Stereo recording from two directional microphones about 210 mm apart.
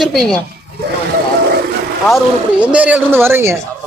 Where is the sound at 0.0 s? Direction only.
Centre (ahead or behind).